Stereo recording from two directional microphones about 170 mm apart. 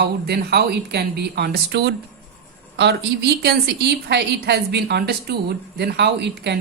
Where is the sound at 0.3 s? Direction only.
75° right (ahead or behind).